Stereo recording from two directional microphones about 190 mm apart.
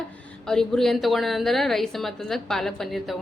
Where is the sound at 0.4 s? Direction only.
5° left (ahead or behind).